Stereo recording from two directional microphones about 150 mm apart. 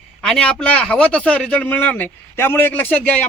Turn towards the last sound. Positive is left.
turn(degrees=10)  # may be behind; listen again after turning